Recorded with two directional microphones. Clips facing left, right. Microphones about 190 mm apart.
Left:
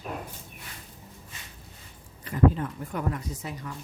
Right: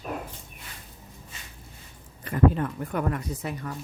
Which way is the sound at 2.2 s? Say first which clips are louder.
Right 1 dB; 60° right (ahead or behind).